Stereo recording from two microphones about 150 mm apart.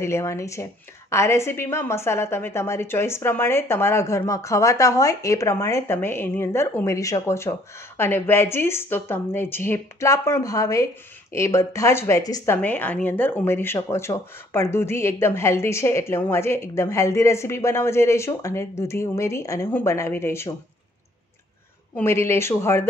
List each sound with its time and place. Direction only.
0.0 s speech: 20° left (ahead or behind)
12.6 s speech: 10° left (ahead or behind)
21.9 s speech: 15° left (ahead or behind)